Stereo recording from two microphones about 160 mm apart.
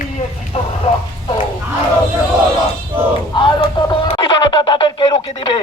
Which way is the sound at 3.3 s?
30° left (ahead or behind).